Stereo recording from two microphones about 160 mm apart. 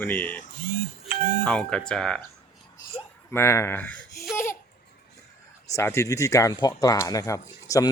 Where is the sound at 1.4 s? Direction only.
5° left (ahead or behind).